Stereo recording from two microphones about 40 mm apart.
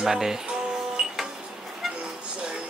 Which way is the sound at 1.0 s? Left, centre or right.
Centre.